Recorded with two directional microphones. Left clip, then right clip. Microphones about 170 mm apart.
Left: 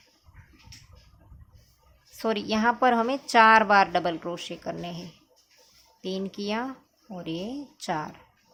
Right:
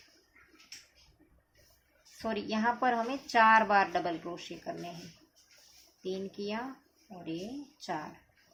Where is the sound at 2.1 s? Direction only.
40° left (ahead or behind).